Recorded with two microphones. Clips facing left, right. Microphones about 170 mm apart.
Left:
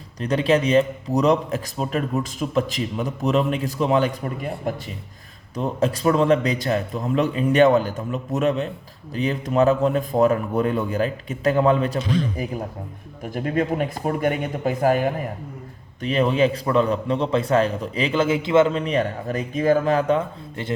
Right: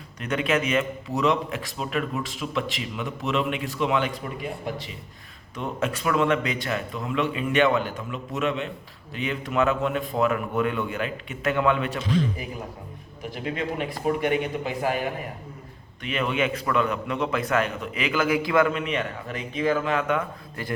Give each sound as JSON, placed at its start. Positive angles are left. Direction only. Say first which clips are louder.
{"t": 0.2, "sound": "a man's voice", "louder": "left 5 dB", "side_deg": 30}